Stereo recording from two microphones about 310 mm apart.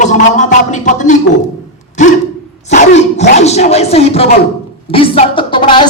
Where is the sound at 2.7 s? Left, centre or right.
Left.